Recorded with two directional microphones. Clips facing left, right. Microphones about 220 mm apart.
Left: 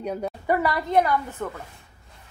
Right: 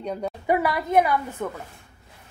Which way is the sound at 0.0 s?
5° left (ahead or behind).